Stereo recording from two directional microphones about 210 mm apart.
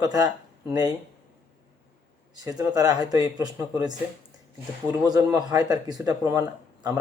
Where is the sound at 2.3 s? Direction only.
15° right (ahead or behind).